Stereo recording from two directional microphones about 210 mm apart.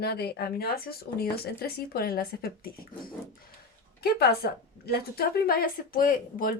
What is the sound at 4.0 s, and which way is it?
A woman's voice, 50° left (ahead or behind).